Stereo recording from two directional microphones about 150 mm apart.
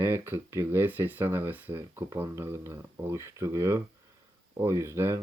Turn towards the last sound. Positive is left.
turn(degrees=-15)  # may be behind; listen again after turning